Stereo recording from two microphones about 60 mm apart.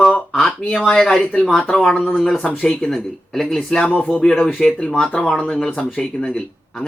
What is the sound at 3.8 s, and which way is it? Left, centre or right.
Speech, left.